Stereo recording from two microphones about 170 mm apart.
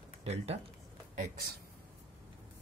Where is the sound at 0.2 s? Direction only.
40° right (ahead or behind).